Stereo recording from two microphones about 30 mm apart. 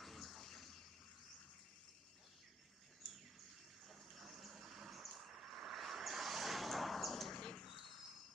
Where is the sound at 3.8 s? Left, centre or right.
Centre.